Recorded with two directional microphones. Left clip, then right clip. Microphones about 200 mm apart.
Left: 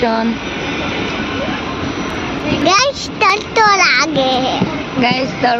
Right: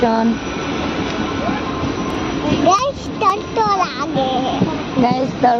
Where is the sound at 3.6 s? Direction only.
15° left (ahead or behind).